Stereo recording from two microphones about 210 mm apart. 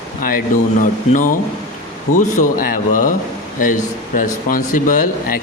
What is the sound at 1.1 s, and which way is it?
Speech, 40° left (ahead or behind).